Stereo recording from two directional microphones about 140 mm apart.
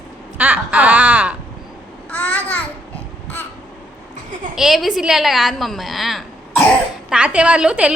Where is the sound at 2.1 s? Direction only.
10° left (ahead or behind).